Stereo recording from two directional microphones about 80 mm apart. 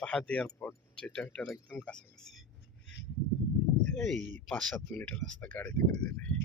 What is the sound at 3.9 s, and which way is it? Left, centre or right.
Speech, centre.